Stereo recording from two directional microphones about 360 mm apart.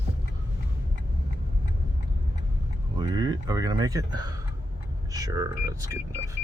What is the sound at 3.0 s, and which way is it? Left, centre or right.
Speech, centre.